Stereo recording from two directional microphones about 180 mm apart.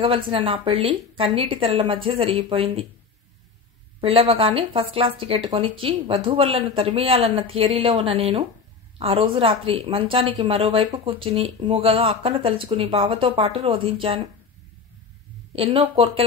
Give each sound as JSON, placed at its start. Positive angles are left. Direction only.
{"t": 0.0, "sound": "speech", "side_deg": -30}
{"t": 4.0, "sound": "speech", "side_deg": -30}
{"t": 15.5, "sound": "speech", "side_deg": -30}